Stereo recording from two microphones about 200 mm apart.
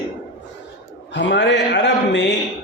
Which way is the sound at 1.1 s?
60° left (ahead or behind).